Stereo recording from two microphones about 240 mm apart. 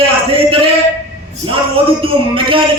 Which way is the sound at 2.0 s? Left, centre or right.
Right.